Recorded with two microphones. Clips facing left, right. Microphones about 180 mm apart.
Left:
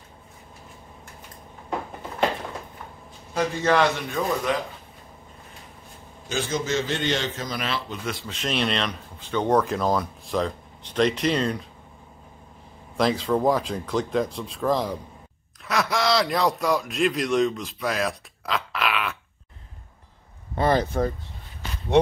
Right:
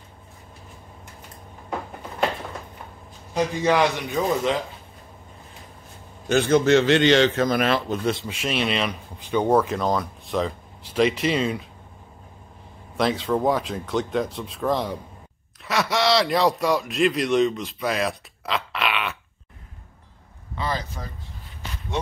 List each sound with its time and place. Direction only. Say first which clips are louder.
3.3 s a man's voice: right 1 dB; 15° right (ahead or behind)
6.2 s a man's voice: right 9 dB; 60° right (ahead or behind)
8.0 s speech: right 7 dB; 25° right (ahead or behind)
8.3 s speech: right 1 dB; 5° right (ahead or behind)
12.9 s speech: even; centre (ahead or behind)
20.5 s speech: left 8 dB; 55° left (ahead or behind)